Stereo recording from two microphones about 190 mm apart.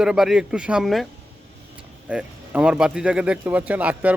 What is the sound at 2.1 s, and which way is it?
Speech, 5° right (ahead or behind).